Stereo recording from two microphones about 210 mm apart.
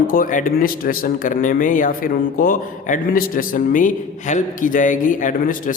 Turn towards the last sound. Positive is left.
turn(degrees=40)  # may be behind; listen again after turning